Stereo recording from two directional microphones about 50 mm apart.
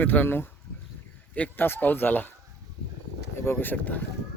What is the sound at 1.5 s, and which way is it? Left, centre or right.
Speech, left.